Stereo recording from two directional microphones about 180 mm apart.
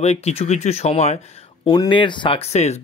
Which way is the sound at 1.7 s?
25° left (ahead or behind).